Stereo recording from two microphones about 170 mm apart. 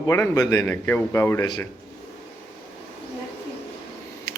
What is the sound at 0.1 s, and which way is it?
A man's voice, 20° left (ahead or behind).